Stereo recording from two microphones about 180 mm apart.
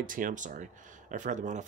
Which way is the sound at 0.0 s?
50° right (ahead or behind).